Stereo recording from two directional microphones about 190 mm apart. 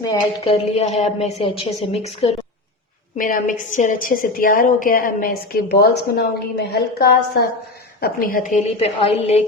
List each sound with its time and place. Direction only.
0.4 s a woman's voice: 30° left (ahead or behind)
3.2 s a woman's voice: 45° left (ahead or behind)
8.6 s a woman's voice: 30° left (ahead or behind)